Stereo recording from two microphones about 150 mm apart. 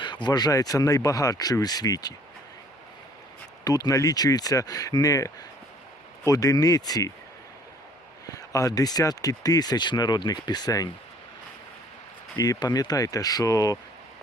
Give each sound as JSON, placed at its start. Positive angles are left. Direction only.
{"t": 0.0, "sound": "speech", "side_deg": 30}
{"t": 3.6, "sound": "speech", "side_deg": 25}
{"t": 8.3, "sound": "speech", "side_deg": 25}
{"t": 12.4, "sound": "speech", "side_deg": 25}